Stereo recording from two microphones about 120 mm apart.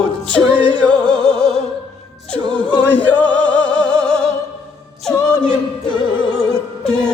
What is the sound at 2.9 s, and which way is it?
Music, 15° left (ahead or behind).